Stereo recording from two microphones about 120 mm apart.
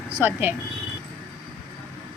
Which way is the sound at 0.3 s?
15° right (ahead or behind).